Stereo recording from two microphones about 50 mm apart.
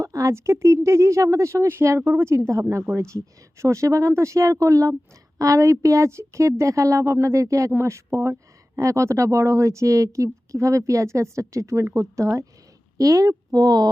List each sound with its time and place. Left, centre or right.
0.0 s speech: right
1.6 s a woman's voice: right
2.9 s speech: right
5.5 s a woman's voice: right
5.8 s speech: right
7.8 s speech: right
11.9 s speech: right